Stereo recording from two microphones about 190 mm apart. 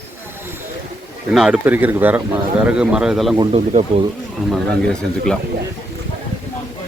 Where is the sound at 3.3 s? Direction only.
25° right (ahead or behind).